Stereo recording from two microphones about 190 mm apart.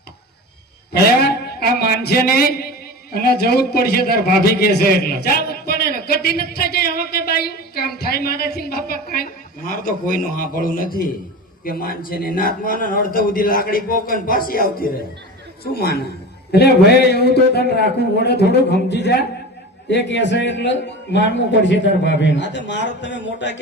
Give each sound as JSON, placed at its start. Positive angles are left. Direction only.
{"t": 1.3, "sound": "a man's voice", "side_deg": 55}